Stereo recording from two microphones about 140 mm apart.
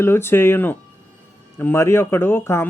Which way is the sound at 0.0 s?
15° left (ahead or behind).